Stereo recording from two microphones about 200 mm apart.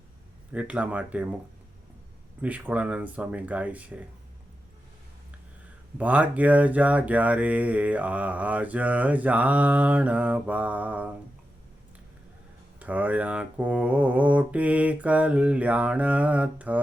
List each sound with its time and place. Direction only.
0.5 s speech: 5° right (ahead or behind)
2.4 s speech: 5° right (ahead or behind)
6.0 s speech: 10° right (ahead or behind)
12.8 s speech: 5° right (ahead or behind)